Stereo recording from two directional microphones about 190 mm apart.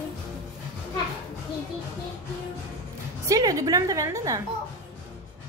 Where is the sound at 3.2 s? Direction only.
20° right (ahead or behind).